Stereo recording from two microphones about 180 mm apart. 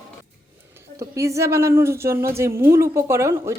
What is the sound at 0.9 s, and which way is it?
Speech, 15° right (ahead or behind).